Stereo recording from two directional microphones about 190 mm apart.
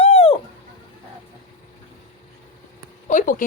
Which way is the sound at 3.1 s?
45° left (ahead or behind).